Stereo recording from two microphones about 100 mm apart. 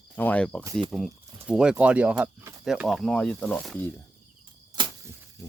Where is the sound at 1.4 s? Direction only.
10° right (ahead or behind).